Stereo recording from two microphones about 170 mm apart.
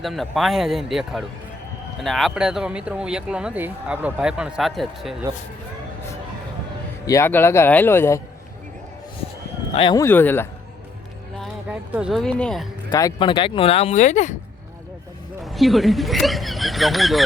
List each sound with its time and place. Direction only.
0.0 s speech: centre (ahead or behind)
7.1 s speech: 15° left (ahead or behind)
9.7 s speech: 30° left (ahead or behind)
10.0 s speech: 10° left (ahead or behind)
11.3 s speech: 5° right (ahead or behind)
12.9 s speech: 25° left (ahead or behind); by 14.3 s 45° left (ahead or behind)
15.4 s speech: centre (ahead or behind)